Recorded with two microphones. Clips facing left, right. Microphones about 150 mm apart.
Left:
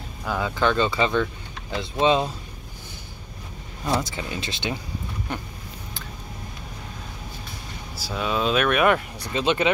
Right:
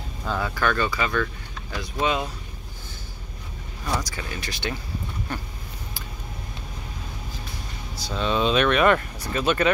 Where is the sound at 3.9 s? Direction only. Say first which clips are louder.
Left 4 dB; 25° left (ahead or behind).